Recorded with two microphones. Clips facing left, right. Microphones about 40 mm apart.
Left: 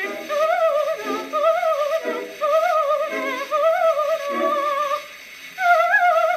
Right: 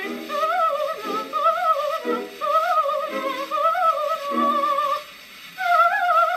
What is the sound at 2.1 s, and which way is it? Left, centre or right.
Music, centre.